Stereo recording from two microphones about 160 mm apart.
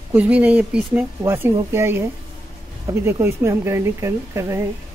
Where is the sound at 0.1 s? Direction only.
10° right (ahead or behind).